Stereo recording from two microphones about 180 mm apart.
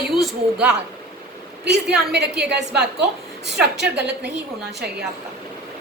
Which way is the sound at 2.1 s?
65° right (ahead or behind).